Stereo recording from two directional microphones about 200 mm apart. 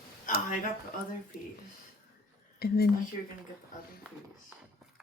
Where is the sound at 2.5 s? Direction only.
50° left (ahead or behind).